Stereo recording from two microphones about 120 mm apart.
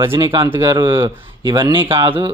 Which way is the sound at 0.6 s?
40° right (ahead or behind).